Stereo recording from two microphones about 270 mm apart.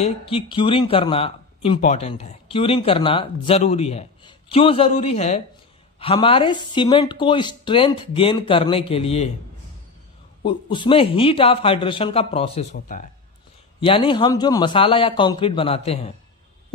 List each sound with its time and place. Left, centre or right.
0.0 s speech: left
10.4 s speech: centre